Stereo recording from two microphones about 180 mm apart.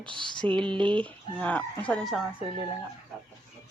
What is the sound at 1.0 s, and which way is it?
Speech, 5° left (ahead or behind).